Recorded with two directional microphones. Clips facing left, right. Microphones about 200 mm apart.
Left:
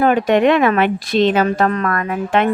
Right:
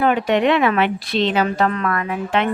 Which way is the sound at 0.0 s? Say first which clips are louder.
Left 4 dB; 45° left (ahead or behind).